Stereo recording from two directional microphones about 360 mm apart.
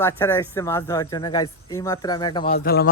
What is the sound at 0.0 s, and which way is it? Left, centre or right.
A man's voice, centre.